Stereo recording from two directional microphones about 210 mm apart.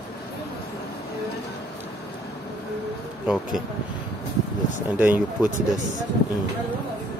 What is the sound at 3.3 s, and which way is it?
Speech, 5° right (ahead or behind).